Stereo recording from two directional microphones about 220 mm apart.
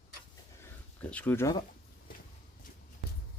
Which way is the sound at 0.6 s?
5° left (ahead or behind).